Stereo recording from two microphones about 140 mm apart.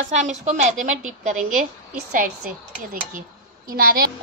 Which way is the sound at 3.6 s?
90° right.